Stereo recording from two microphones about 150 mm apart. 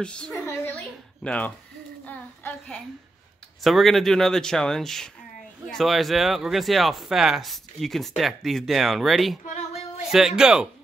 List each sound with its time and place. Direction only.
0.0 s speech: 5° left (ahead or behind)
0.5 s a sound: 10° left (ahead or behind)
3.6 s speech: centre (ahead or behind)